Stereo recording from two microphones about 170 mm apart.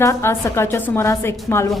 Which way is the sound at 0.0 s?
15° left (ahead or behind).